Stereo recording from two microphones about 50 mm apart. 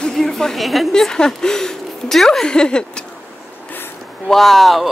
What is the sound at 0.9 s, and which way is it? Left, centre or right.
A woman's voice, centre.